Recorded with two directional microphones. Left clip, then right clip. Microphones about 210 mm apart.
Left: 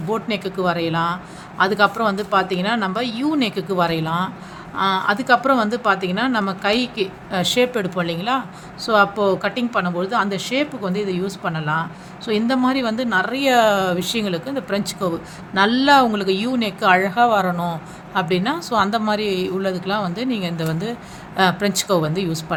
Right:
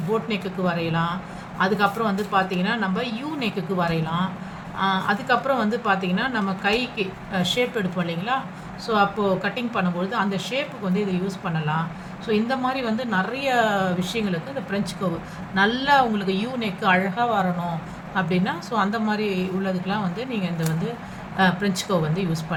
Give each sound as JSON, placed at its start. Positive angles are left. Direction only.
{"t": 0.1, "sound": "speech", "side_deg": 55}